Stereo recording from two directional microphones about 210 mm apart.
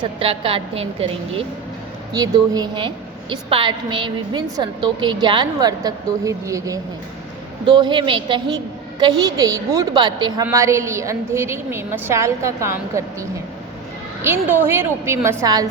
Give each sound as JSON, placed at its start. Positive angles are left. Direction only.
{"t": 0.0, "sound": "a woman's voice", "side_deg": -25}
{"t": 2.1, "sound": "a woman's voice", "side_deg": -15}
{"t": 7.8, "sound": "a woman's voice", "side_deg": -20}
{"t": 14.3, "sound": "a woman's voice", "side_deg": -10}